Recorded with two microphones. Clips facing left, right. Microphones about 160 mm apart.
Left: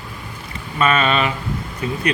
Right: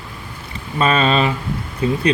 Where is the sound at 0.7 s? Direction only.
35° right (ahead or behind).